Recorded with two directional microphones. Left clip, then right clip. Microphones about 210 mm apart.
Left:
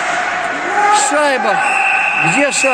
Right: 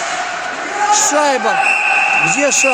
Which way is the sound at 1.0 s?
15° right (ahead or behind).